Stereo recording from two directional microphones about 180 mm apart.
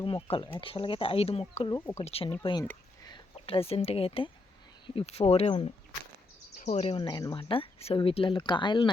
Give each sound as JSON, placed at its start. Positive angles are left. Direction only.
{"t": 0.0, "sound": "speech", "side_deg": 30}